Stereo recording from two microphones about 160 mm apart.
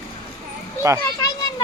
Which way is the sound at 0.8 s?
20° right (ahead or behind).